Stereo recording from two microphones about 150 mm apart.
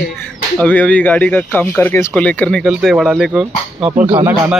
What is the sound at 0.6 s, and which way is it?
A man's voice, 10° left (ahead or behind).